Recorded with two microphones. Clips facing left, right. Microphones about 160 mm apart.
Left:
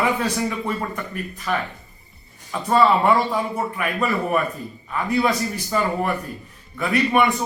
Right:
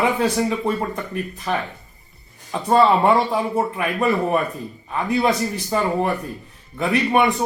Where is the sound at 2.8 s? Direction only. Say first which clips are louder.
Left 1 dB; 20° right (ahead or behind).